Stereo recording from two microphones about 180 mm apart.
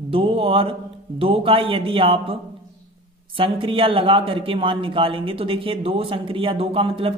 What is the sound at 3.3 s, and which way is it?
Speech, 30° right (ahead or behind).